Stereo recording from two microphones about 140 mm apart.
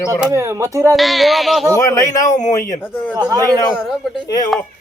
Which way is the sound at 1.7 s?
20° left (ahead or behind).